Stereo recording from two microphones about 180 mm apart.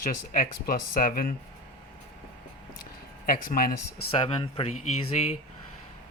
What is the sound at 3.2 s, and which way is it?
Speech, 50° left (ahead or behind).